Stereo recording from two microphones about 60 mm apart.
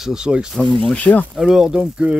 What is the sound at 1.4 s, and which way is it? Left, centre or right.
Speech, centre.